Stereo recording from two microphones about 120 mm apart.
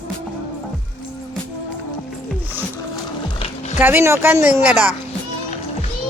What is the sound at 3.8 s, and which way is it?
Speech, 20° right (ahead or behind).